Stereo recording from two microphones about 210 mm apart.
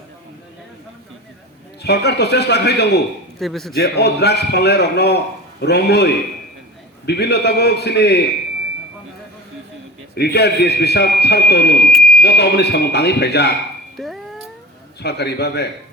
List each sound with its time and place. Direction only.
1.8 s a man's voice: 50° left (ahead or behind)
3.3 s a man's voice: centre (ahead or behind)
3.8 s a man's voice: 50° left (ahead or behind)
10.2 s a man's voice: 50° left (ahead or behind)
13.9 s music: centre (ahead or behind)
15.0 s a man's voice: 50° left (ahead or behind)